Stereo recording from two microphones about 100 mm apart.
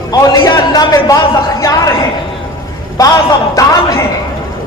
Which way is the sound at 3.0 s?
40° left (ahead or behind).